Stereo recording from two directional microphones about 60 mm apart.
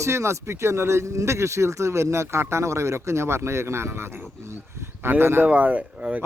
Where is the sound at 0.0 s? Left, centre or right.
Right.